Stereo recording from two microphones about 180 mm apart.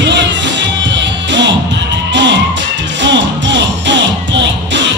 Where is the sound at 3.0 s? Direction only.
85° right.